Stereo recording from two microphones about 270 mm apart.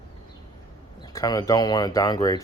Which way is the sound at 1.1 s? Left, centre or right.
Centre.